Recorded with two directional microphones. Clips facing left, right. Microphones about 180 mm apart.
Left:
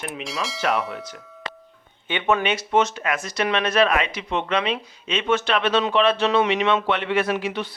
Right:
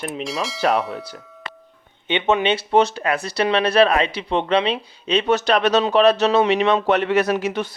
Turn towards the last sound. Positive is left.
turn(degrees=-40)  # may be behind; listen again after turning